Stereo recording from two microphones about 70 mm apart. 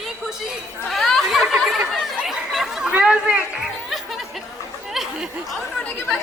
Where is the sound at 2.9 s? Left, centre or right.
Centre.